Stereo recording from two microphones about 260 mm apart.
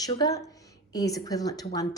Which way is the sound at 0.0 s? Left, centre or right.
Centre.